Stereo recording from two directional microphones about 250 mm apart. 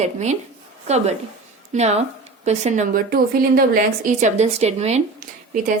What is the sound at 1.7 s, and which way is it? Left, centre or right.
Speech, right.